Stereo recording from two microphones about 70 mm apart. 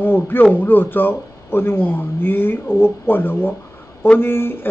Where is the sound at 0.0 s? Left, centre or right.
Left.